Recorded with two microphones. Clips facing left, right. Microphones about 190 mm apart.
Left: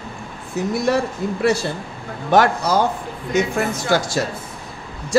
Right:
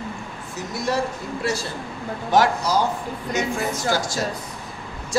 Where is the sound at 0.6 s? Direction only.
55° left (ahead or behind).